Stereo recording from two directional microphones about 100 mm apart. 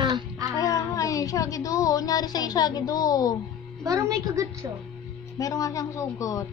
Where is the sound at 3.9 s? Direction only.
35° right (ahead or behind).